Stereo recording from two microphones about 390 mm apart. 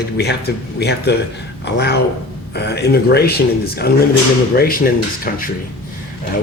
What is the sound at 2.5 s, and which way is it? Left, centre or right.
Speech, left.